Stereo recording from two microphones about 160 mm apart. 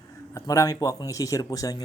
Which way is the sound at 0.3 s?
20° left (ahead or behind).